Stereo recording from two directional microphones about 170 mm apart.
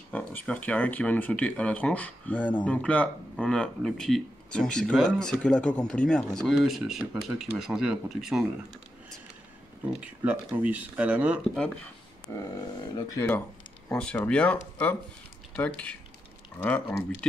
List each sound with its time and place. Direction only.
0.1 s speech: 10° left (ahead or behind)
9.9 s speech: 10° right (ahead or behind)
12.3 s wild animals: 20° left (ahead or behind)
12.9 s speech: 15° left (ahead or behind)